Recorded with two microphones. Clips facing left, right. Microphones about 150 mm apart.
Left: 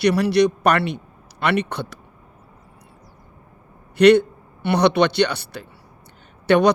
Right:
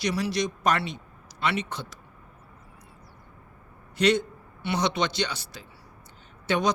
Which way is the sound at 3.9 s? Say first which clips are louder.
Left 11 dB; 65° left (ahead or behind).